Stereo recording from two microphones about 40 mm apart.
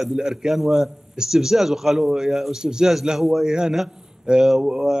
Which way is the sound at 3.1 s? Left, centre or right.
Centre.